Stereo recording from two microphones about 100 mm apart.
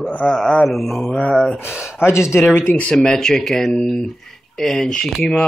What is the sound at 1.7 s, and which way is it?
Speech, 5° right (ahead or behind).